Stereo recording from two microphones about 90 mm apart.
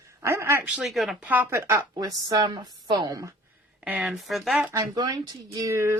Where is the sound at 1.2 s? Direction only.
20° right (ahead or behind).